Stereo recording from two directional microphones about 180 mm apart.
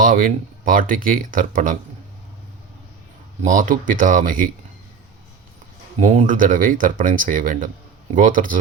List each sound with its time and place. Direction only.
0.0 s speech: 50° right (ahead or behind)
3.4 s speech: 45° right (ahead or behind)
6.0 s speech: 45° right (ahead or behind)